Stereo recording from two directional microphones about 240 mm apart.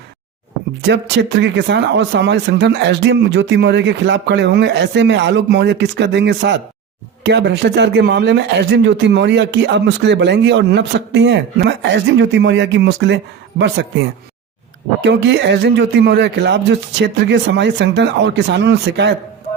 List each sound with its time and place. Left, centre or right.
0.8 s speech: right
15.0 s speech: right